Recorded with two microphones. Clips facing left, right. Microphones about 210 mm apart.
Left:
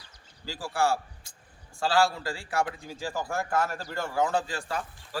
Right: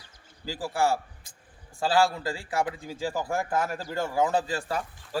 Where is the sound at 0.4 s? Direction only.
20° right (ahead or behind).